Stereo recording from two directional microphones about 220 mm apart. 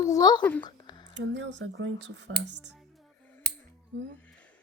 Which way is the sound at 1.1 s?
55° right (ahead or behind).